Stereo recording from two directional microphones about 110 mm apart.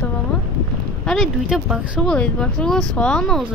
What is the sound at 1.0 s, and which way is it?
Speech, centre (ahead or behind).